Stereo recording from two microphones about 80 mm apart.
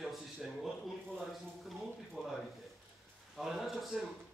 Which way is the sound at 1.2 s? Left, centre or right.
Centre.